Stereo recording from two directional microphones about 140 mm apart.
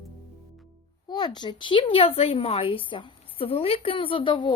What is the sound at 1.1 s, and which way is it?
Speech, 30° left (ahead or behind).